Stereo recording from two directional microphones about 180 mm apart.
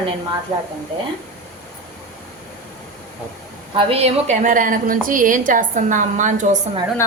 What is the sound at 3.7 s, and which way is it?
A woman's voice, 35° right (ahead or behind).